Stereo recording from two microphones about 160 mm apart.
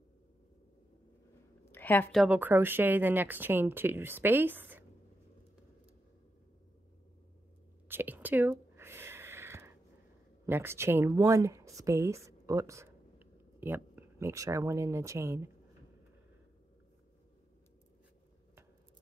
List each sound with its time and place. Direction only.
1.7 s a sound: 10° left (ahead or behind)
2.1 s speech: 10° right (ahead or behind)
7.9 s whispering: 10° right (ahead or behind)
10.4 s speech: 15° right (ahead or behind)